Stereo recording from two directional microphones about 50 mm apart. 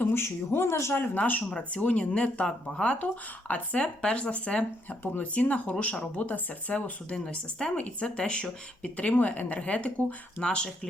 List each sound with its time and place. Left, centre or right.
0.1 s speech: left
1.1 s speech: left
1.5 s speech: centre